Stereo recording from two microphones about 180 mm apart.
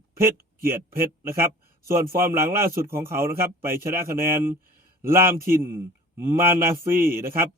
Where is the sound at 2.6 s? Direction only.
55° right (ahead or behind).